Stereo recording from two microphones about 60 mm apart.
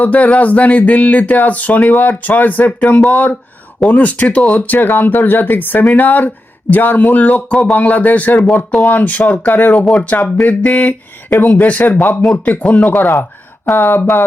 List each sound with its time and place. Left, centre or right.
0.0 s speech: left
13.7 s speech: left